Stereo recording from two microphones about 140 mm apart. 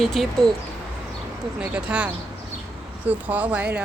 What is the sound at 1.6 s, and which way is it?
Speech, 10° right (ahead or behind).